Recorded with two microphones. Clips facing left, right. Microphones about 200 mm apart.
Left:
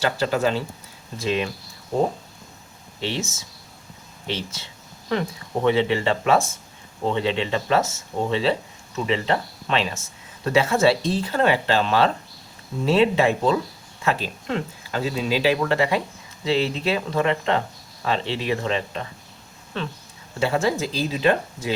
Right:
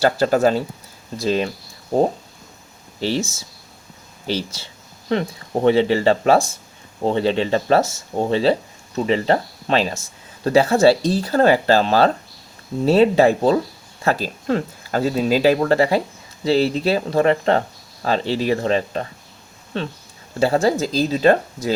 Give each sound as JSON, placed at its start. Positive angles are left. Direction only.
{"t": 0.0, "sound": "speech", "side_deg": -45}
{"t": 3.0, "sound": "speech", "side_deg": -35}
{"t": 20.4, "sound": "speech", "side_deg": -35}